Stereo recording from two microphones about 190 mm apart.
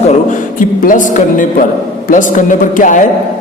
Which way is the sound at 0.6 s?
45° left (ahead or behind).